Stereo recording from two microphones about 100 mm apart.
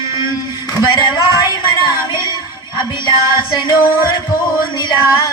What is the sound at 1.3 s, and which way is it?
Music, 45° left (ahead or behind).